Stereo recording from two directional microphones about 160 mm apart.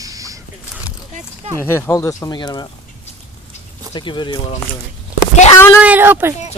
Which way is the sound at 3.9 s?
30° left (ahead or behind).